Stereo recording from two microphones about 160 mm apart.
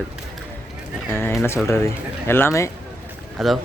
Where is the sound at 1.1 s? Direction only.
15° left (ahead or behind).